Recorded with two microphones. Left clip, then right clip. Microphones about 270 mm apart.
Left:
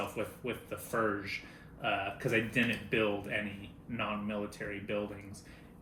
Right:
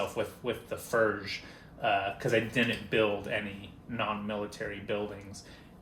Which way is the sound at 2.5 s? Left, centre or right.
Centre.